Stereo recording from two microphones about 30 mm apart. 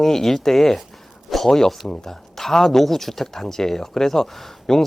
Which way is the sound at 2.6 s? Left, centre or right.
Centre.